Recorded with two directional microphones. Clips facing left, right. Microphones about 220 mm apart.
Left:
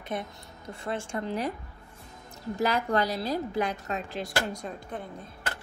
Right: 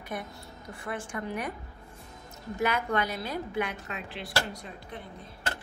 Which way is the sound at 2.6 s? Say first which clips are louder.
Left 2 dB; 35° left (ahead or behind).